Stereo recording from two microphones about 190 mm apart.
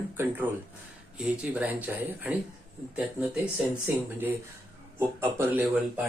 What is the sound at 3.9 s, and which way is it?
Speech, 10° right (ahead or behind).